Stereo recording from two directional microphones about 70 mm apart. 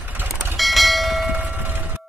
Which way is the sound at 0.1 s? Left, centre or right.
Right.